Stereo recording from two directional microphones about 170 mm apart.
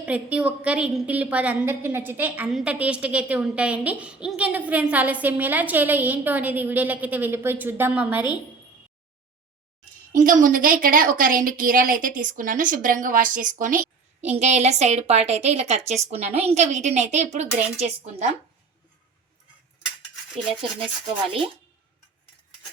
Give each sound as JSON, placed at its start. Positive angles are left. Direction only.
{"t": 0.0, "sound": "a woman's voice", "side_deg": -5}
{"t": 10.1, "sound": "a woman's voice", "side_deg": -50}